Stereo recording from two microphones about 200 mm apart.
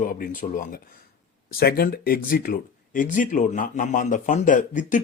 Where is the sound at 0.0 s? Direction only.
45° left (ahead or behind).